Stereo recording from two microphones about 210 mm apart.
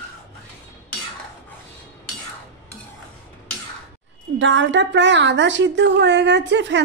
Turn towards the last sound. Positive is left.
turn(degrees=-55)  # may be behind; listen again after turning